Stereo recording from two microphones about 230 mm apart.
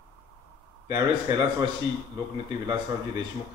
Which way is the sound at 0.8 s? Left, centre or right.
Centre.